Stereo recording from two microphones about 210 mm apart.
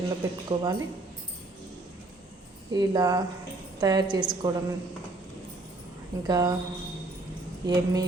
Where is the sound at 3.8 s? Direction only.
20° right (ahead or behind).